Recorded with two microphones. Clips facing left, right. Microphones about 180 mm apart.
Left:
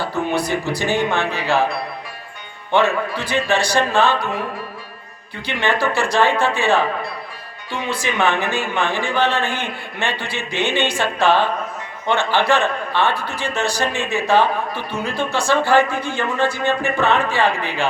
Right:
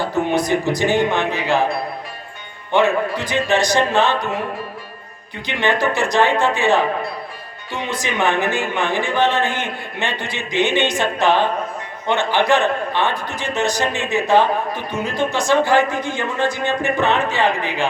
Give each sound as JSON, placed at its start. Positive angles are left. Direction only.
{"t": 0.0, "sound": "a man's voice", "side_deg": -20}
{"t": 2.7, "sound": "a man's voice", "side_deg": -15}
{"t": 5.5, "sound": "a man's voice", "side_deg": -20}